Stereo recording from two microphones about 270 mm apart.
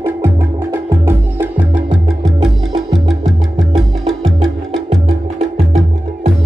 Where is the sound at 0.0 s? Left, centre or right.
Centre.